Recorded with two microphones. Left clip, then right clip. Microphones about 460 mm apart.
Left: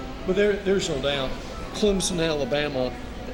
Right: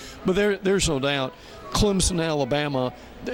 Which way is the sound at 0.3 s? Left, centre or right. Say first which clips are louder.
Even; right.